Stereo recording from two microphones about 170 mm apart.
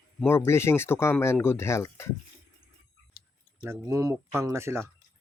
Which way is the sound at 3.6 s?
15° right (ahead or behind).